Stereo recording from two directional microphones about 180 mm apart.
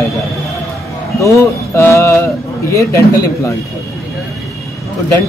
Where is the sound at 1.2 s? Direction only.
15° left (ahead or behind).